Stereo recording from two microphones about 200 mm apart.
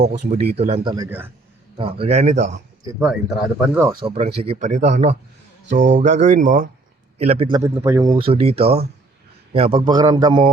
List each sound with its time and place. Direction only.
0.0 s speech: 35° right (ahead or behind)
0.9 s a man's voice: 10° right (ahead or behind)
1.8 s speech: 30° right (ahead or behind)
3.0 s speech: 5° right (ahead or behind)
4.0 s speech: 30° right (ahead or behind)
7.6 s speech: 15° right (ahead or behind)